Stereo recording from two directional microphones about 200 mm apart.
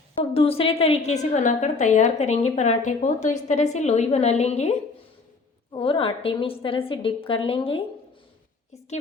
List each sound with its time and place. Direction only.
0.3 s a woman's voice: 30° left (ahead or behind)